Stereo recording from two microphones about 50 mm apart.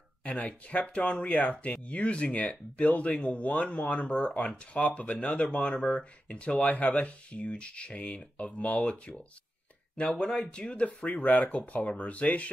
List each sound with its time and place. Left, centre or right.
0.4 s speech: left
10.9 s speech: left